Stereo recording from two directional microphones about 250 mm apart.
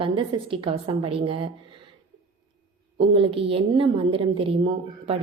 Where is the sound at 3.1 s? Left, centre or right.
Right.